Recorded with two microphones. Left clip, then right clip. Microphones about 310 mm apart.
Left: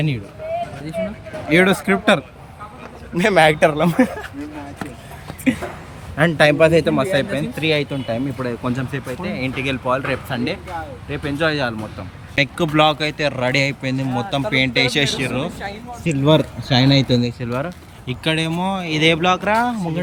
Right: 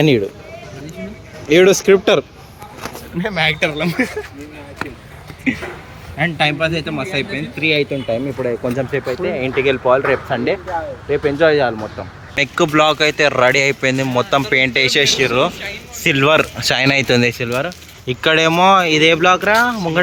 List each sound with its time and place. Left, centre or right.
1.5 s speech: centre
3.2 s a man's voice: left; by 4.1 s centre
6.1 s a man's voice: centre
16.6 s speech: right
17.1 s speech: centre